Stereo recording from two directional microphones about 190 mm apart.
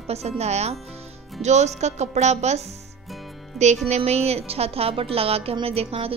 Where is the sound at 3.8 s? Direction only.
35° right (ahead or behind).